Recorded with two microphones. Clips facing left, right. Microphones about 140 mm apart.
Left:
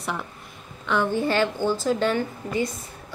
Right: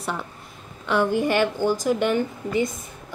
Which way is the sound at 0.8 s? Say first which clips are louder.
Right 2 dB; 10° right (ahead or behind).